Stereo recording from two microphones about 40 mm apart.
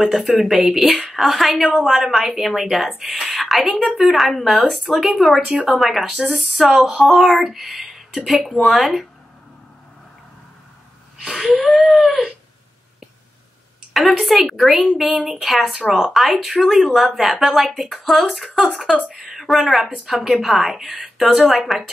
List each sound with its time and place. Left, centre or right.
0.0 s speech: centre
5.4 s speech: right
5.7 s speech: centre
11.2 s a sound: centre
13.9 s a woman's voice: centre